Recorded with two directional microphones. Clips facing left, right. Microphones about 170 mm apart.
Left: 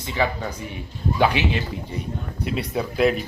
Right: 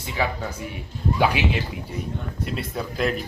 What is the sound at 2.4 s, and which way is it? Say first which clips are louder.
Speech: left 5 dB; centre (ahead or behind).